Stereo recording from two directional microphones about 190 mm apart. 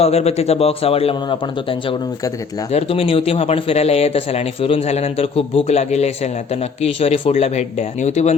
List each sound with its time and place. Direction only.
0.0 s a man's voice: 35° left (ahead or behind)
2.7 s a man's voice: 30° left (ahead or behind)